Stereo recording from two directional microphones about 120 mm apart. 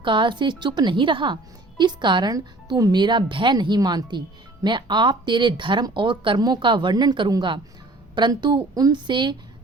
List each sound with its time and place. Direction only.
0.0 s speech: 45° right (ahead or behind)